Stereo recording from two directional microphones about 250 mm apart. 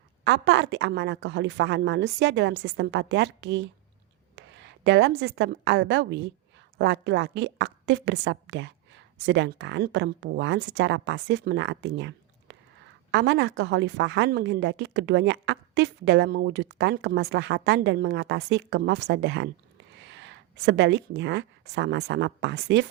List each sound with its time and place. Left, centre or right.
0.3 s a woman's voice: right